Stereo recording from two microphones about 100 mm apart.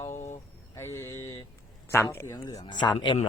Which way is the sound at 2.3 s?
35° left (ahead or behind).